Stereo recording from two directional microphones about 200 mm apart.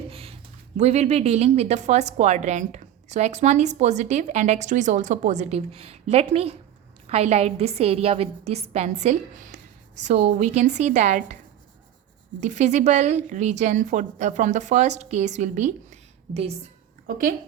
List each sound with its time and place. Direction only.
0.1 s a sound: 30° right (ahead or behind)
0.8 s a woman's voice: 35° right (ahead or behind)
12.4 s a woman's voice: 35° right (ahead or behind)
17.1 s a woman's voice: 40° right (ahead or behind)